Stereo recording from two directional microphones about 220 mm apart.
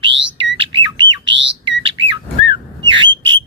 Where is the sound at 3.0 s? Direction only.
60° right (ahead or behind).